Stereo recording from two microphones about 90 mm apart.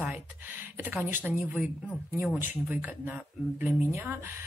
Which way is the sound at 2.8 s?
20° right (ahead or behind).